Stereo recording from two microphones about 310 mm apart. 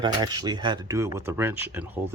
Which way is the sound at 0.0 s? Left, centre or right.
Centre.